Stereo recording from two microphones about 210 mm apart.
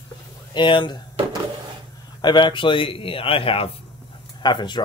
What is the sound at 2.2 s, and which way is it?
A man's voice, 20° left (ahead or behind).